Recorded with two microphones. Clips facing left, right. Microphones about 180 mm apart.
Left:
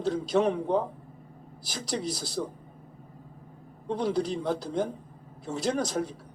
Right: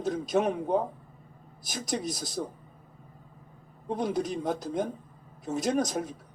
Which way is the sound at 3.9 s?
20° right (ahead or behind).